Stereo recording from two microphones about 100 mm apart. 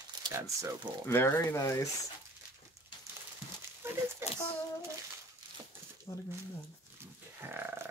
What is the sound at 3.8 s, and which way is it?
Speech, 25° right (ahead or behind).